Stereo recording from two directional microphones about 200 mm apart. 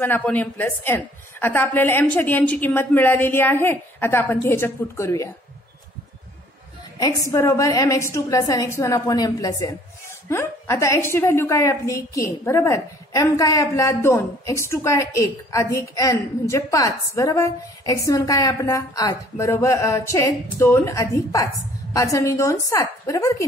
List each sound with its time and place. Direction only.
0.0 s a woman's voice: 10° left (ahead or behind)
7.0 s a woman's voice: 15° left (ahead or behind)